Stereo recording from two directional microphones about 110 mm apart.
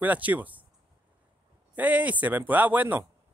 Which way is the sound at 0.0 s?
15° right (ahead or behind).